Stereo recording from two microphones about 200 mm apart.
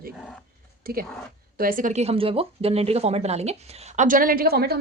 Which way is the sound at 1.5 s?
45° right (ahead or behind).